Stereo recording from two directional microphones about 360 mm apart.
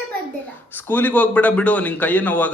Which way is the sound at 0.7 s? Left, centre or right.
Centre.